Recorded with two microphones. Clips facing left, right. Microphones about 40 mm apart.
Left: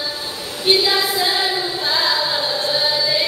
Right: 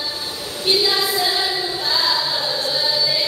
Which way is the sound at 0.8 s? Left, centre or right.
Centre.